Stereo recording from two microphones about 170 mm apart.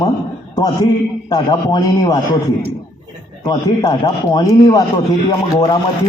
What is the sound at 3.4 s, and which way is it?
A man's voice, 25° left (ahead or behind).